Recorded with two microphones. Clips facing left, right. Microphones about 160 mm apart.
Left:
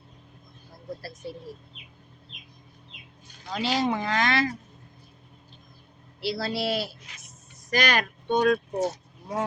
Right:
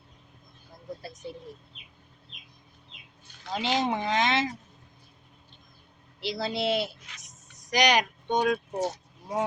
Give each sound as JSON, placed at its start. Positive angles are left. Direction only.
{"t": 3.5, "sound": "speech", "side_deg": -20}
{"t": 6.1, "sound": "speech", "side_deg": -20}